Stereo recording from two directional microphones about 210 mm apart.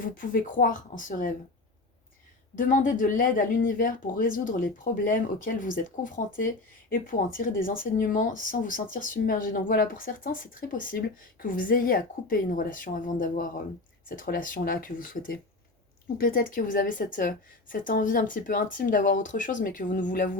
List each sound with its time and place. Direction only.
0.0 s a woman's voice: 40° left (ahead or behind)
2.6 s a woman's voice: 40° left (ahead or behind)